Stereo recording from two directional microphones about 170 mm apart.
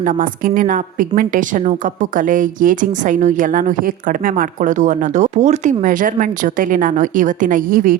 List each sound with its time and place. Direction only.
0.0 s a woman's voice: 55° right (ahead or behind)